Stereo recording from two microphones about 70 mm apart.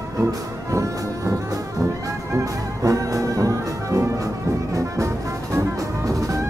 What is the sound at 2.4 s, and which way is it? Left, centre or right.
Music, right.